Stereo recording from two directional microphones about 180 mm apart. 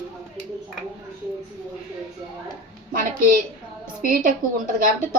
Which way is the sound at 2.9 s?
50° right (ahead or behind).